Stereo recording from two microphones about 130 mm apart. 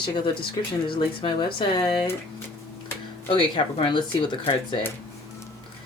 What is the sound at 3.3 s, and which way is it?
Speech, 40° left (ahead or behind).